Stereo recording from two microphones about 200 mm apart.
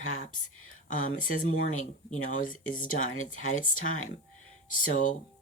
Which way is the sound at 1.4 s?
90° left.